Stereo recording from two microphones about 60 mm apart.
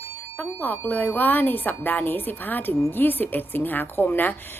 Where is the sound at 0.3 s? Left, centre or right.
Left.